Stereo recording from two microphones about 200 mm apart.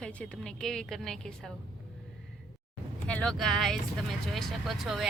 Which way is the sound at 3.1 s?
5° left (ahead or behind).